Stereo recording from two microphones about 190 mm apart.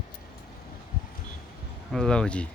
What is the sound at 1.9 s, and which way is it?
Speech, 5° left (ahead or behind).